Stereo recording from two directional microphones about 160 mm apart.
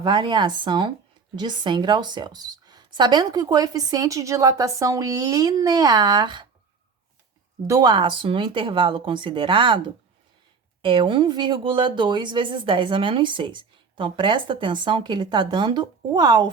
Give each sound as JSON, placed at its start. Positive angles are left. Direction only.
{"t": 0.0, "sound": "a woman's voice", "side_deg": -30}
{"t": 7.7, "sound": "speech", "side_deg": -25}